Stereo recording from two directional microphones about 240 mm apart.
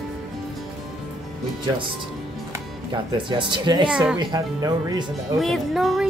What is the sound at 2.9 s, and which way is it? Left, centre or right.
Speech, centre.